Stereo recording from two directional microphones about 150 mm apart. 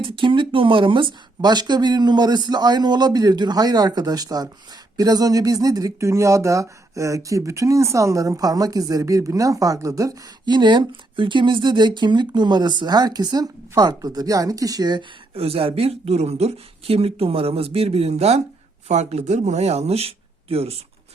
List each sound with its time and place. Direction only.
0.0 s speech: 35° right (ahead or behind)